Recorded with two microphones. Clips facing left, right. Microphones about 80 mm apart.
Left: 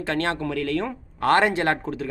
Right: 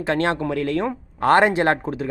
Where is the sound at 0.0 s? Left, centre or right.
Centre.